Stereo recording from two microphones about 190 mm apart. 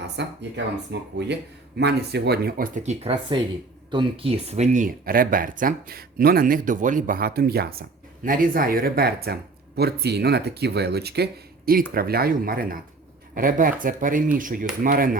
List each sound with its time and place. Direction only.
0.0 s speech: 65° right (ahead or behind); by 15.2 s 50° right (ahead or behind)